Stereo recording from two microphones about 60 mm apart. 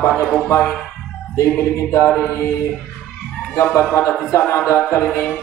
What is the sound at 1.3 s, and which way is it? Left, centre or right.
Music, left.